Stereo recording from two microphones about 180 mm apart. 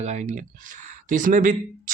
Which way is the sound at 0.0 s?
40° right (ahead or behind).